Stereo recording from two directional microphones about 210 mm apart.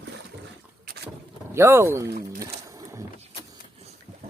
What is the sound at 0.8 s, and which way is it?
Boat, 50° right (ahead or behind).